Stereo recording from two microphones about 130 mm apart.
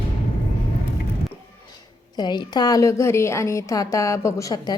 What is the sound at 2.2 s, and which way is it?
A woman's voice, 35° left (ahead or behind).